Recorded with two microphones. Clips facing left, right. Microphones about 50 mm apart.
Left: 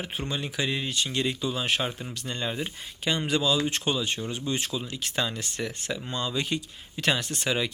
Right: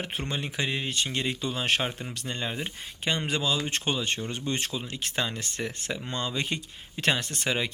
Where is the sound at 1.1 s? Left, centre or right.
Right.